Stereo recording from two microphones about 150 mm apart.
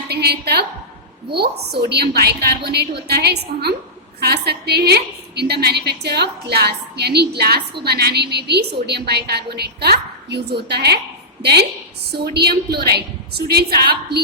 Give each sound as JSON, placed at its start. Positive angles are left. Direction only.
{"t": 0.1, "sound": "a woman's voice", "side_deg": -90}
{"t": 12.1, "sound": "a woman's voice", "side_deg": -90}